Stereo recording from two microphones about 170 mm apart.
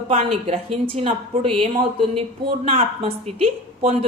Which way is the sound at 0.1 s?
35° right (ahead or behind).